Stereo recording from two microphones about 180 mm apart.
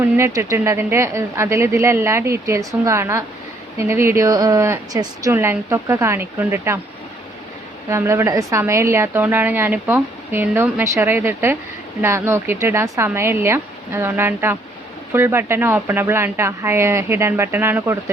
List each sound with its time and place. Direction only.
0.0 s a woman's voice: 15° right (ahead or behind)
7.9 s a woman's voice: 15° right (ahead or behind)